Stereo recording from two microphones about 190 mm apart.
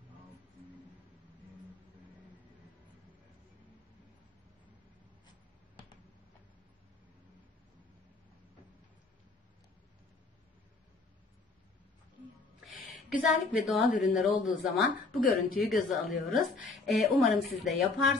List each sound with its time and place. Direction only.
13.3 s a woman's voice: centre (ahead or behind)
15.0 s speech: 50° left (ahead or behind)
15.9 s a woman's voice: centre (ahead or behind)